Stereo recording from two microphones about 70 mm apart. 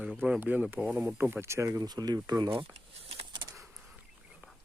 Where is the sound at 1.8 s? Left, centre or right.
Right.